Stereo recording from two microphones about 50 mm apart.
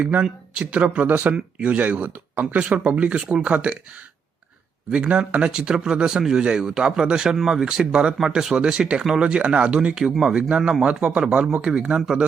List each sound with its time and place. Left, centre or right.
0.0 s speech: right
4.9 s speech: right; by 10.8 s centre
10.8 s speech: right